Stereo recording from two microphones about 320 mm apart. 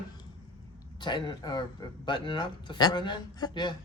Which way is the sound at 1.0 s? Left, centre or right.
Centre.